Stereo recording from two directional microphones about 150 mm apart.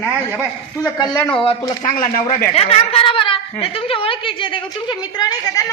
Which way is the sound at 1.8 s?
65° left (ahead or behind).